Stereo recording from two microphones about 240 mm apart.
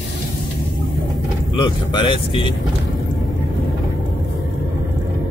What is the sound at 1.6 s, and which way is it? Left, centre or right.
Speech, centre.